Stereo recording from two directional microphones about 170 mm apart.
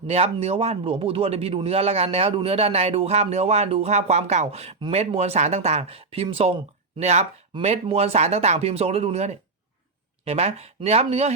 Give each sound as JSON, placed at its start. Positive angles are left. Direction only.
{"t": 0.1, "sound": "speech", "side_deg": -35}